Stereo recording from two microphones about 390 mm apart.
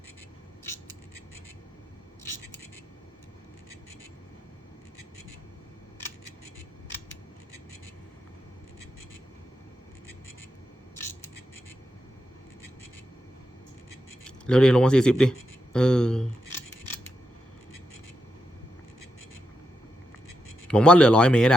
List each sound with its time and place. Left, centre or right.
14.3 s speech: centre
20.7 s speech: centre